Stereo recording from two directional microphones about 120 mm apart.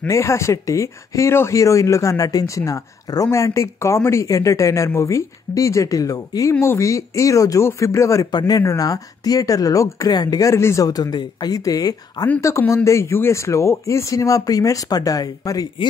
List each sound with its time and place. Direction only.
0.0 s speech: 25° left (ahead or behind)
8.3 s speech: 35° left (ahead or behind)